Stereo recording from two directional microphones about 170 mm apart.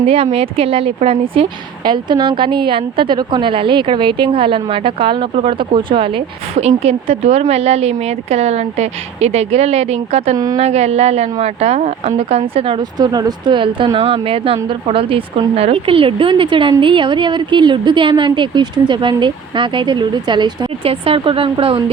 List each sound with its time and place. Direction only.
0.0 s a woman's voice: 35° right (ahead or behind)
10.3 s speech: 20° right (ahead or behind)
10.6 s a woman's voice: 40° right (ahead or behind)